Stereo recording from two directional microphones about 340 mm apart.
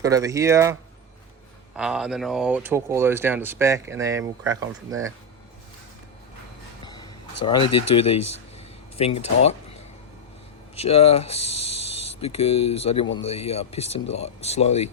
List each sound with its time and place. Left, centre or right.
0.0 s speech: centre
6.8 s a sound: centre
7.4 s speech: centre
7.7 s speech: left
7.9 s speech: centre
8.5 s a sound: centre
10.8 s speech: centre